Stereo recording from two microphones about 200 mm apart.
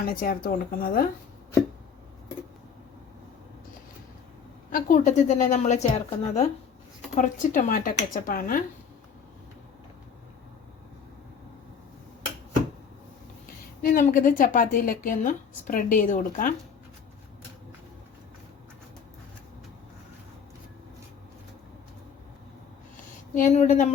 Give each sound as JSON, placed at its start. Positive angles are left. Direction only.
{"t": 0.0, "sound": "a woman's voice", "side_deg": 45}
{"t": 4.7, "sound": "a woman's voice", "side_deg": 40}
{"t": 13.8, "sound": "a woman's voice", "side_deg": 45}
{"t": 23.3, "sound": "speech", "side_deg": 40}